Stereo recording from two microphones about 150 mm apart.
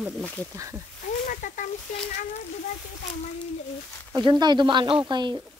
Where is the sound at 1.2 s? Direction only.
65° left (ahead or behind).